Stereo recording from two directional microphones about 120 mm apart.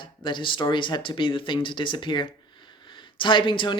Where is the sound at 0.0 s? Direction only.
40° left (ahead or behind).